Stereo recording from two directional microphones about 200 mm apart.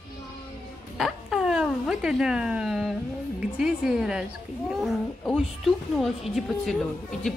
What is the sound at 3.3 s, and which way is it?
Speech, 5° right (ahead or behind).